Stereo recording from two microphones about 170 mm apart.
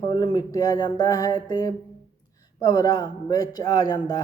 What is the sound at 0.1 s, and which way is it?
A man's voice, 25° left (ahead or behind).